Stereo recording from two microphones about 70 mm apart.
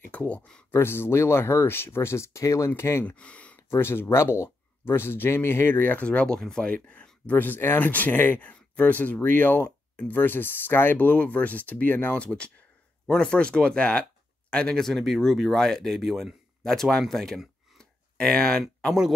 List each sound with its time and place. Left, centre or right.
0.1 s speech: left
0.7 s speech: left
3.1 s speech: centre
3.7 s speech: left; by 17.4 s centre
17.7 s a sound: centre